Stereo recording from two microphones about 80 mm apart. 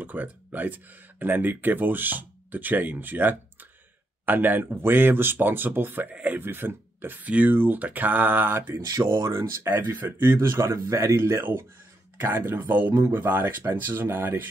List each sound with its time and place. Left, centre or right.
0.0 s speech: right